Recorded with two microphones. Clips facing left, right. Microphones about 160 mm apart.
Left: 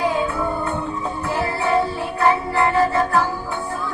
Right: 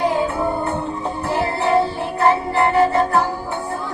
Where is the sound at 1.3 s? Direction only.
25° right (ahead or behind).